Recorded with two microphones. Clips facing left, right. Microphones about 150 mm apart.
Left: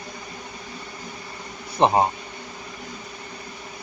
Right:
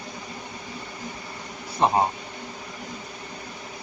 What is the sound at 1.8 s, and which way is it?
Speech, 20° left (ahead or behind).